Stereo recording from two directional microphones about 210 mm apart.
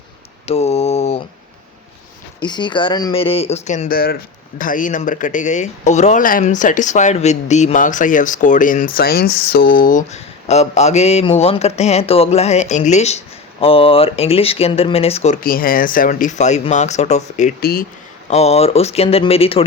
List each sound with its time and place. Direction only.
0.4 s a sound: 30° left (ahead or behind)
2.4 s speech: 20° left (ahead or behind)
15.4 s speech: 45° left (ahead or behind)
18.3 s speech: 30° left (ahead or behind)